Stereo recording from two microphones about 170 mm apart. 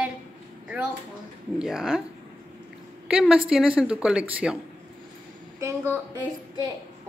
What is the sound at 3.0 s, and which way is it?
A woman's voice, 5° right (ahead or behind).